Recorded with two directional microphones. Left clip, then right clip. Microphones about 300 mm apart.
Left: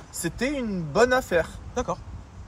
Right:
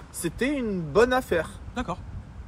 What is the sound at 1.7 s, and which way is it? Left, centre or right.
Speech, centre.